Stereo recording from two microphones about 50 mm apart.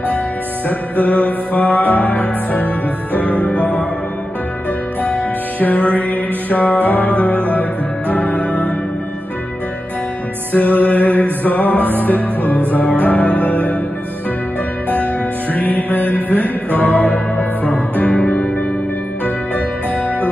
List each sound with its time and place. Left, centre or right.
0.7 s music: left
5.0 s music: left
10.5 s music: left
15.5 s music: left